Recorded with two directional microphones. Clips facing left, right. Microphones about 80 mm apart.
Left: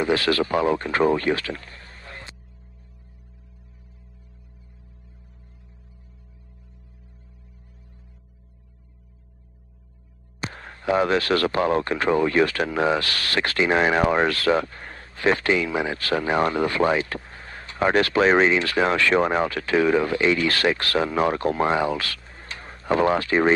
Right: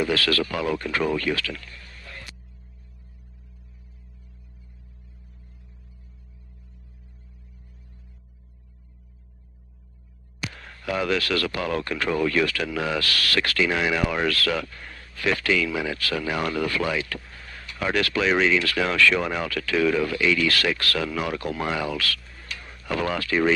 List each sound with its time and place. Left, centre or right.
0.0 s speech: left
10.4 s speech: left